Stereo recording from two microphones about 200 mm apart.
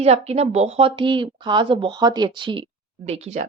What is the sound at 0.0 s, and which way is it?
Speech, 30° right (ahead or behind).